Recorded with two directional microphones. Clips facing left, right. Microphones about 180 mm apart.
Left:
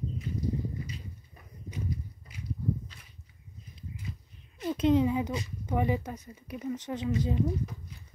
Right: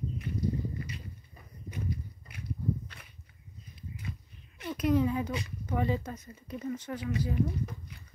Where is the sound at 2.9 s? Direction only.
60° right (ahead or behind).